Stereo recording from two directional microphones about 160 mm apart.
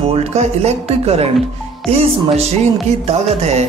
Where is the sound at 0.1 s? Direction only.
40° right (ahead or behind).